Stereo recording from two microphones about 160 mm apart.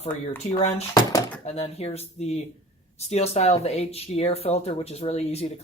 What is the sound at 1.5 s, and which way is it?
Speech, 40° left (ahead or behind).